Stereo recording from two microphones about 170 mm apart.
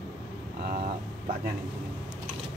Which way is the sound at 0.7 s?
55° right (ahead or behind).